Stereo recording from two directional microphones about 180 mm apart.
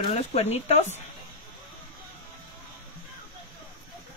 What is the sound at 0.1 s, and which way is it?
Speech, 35° left (ahead or behind).